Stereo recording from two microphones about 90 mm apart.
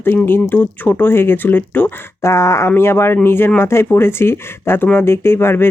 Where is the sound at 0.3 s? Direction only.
20° left (ahead or behind).